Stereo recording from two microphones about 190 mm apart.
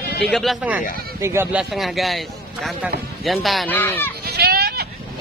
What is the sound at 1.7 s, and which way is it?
A man's voice, centre (ahead or behind).